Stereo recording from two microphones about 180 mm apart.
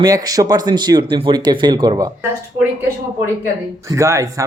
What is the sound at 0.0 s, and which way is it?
Speech, 20° right (ahead or behind).